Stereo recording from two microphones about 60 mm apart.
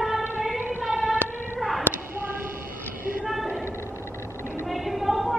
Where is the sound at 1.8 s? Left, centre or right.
Right.